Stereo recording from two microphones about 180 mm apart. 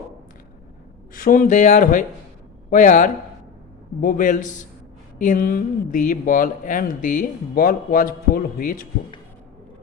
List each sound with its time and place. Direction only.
1.1 s speech: 50° left (ahead or behind)